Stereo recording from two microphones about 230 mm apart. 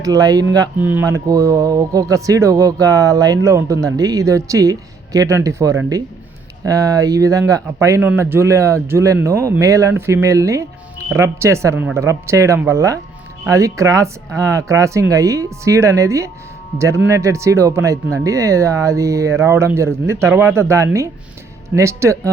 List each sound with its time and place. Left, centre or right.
0.0 s speech: centre